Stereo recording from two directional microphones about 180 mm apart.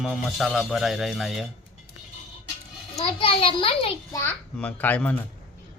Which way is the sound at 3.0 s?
30° left (ahead or behind).